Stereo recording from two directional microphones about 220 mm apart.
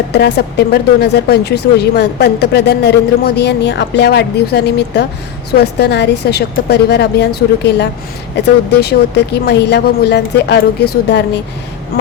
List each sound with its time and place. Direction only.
0.1 s speech: 50° left (ahead or behind)